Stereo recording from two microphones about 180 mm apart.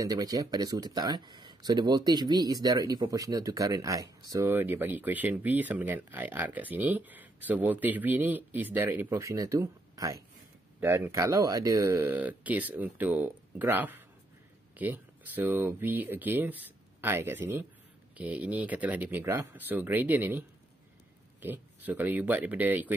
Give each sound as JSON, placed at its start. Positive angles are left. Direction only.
{"t": 0.0, "sound": "speech", "side_deg": -20}